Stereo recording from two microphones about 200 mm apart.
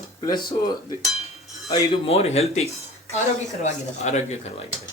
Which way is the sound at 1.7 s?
30° left (ahead or behind).